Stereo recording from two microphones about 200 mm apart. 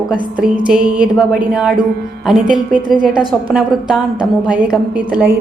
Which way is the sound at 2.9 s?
5° right (ahead or behind).